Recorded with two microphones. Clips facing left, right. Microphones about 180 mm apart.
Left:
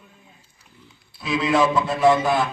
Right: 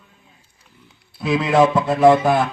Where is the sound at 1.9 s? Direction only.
55° right (ahead or behind).